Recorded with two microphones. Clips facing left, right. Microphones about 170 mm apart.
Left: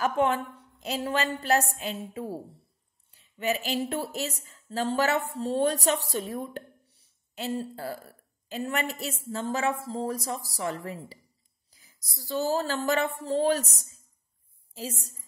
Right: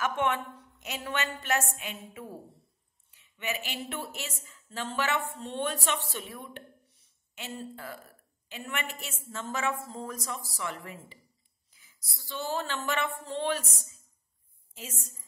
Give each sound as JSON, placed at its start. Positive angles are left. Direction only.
{"t": 0.0, "sound": "a woman's voice", "side_deg": 35}